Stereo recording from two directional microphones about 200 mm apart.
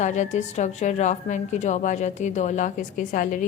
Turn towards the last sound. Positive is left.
turn(degrees=40)  # may be behind; listen again after turning